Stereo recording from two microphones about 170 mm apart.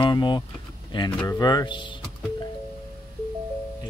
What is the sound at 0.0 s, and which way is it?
Speech, 25° left (ahead or behind).